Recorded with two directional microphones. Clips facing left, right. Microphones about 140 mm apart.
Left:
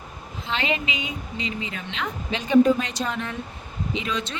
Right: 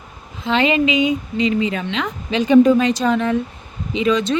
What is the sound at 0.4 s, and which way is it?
Speech, 90° right.